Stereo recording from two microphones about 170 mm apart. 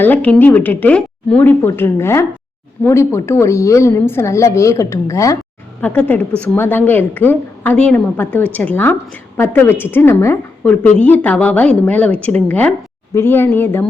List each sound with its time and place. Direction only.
0.0 s a woman's voice: 10° left (ahead or behind)